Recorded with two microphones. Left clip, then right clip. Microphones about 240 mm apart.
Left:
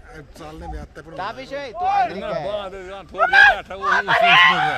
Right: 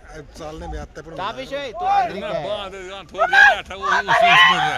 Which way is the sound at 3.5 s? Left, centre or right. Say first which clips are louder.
Right 1 dB; left.